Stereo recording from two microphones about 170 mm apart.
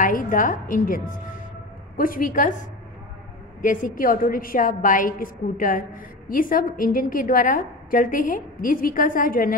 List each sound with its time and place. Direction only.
0.0 s a woman's voice: 50° left (ahead or behind)
3.6 s a woman's voice: 50° left (ahead or behind)